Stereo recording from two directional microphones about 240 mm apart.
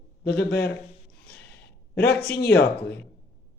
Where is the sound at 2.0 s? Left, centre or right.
Left.